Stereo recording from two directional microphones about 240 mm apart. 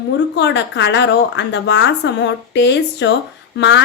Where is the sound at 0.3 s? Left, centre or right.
Left.